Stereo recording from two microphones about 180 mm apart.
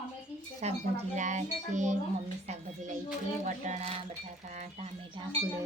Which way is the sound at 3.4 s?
40° right (ahead or behind).